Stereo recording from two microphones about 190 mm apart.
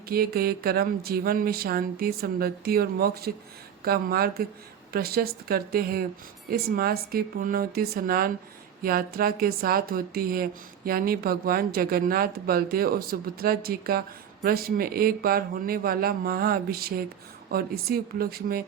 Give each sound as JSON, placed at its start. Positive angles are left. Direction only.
{"t": 0.1, "sound": "speech", "side_deg": -55}